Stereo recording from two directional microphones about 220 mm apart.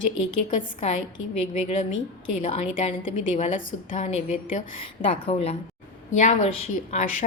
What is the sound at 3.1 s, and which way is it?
A woman's voice, 30° left (ahead or behind).